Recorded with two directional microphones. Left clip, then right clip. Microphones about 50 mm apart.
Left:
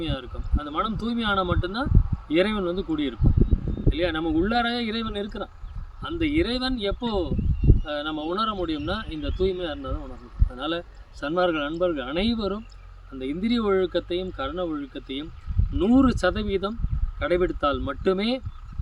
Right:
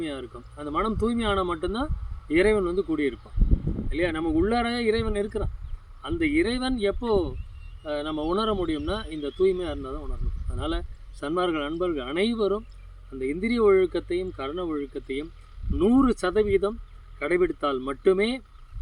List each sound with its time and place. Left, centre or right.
0.0 s speech: left
11.2 s speech: left
14.5 s speech: left